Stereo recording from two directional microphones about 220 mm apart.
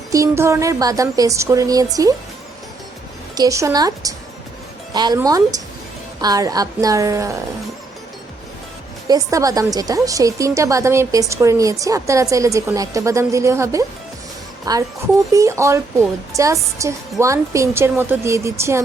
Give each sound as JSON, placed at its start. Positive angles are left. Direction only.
{"t": 0.1, "sound": "a woman's voice", "side_deg": -15}
{"t": 3.3, "sound": "a woman's voice", "side_deg": -15}
{"t": 9.0, "sound": "a woman's voice", "side_deg": -15}